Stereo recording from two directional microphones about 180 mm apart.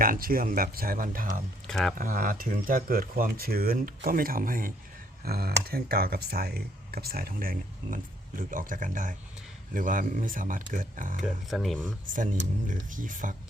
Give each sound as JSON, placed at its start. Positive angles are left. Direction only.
{"t": 0.0, "sound": "speech", "side_deg": -55}
{"t": 1.6, "sound": "speech", "side_deg": 5}
{"t": 2.0, "sound": "speech", "side_deg": -50}
{"t": 11.4, "sound": "speech", "side_deg": 0}
{"t": 12.1, "sound": "speech", "side_deg": -45}